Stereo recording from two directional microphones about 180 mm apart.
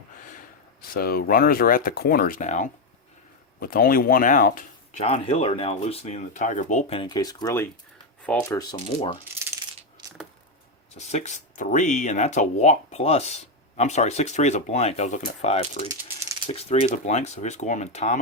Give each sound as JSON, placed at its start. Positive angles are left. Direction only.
{"t": 0.9, "sound": "speech", "side_deg": 55}
{"t": 3.6, "sound": "speech", "side_deg": 55}
{"t": 5.0, "sound": "speech", "side_deg": 35}
{"t": 7.0, "sound": "speech", "side_deg": 20}
{"t": 10.9, "sound": "speech", "side_deg": 40}